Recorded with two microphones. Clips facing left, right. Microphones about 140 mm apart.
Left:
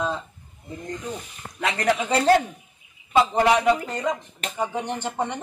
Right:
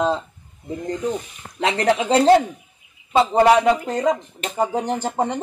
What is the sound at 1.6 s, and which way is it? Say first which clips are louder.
Speech: right 4 dB; 25° right (ahead or behind).